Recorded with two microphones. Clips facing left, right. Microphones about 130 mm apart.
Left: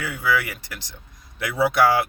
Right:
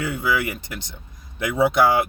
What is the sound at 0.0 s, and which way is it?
Speech, 20° right (ahead or behind).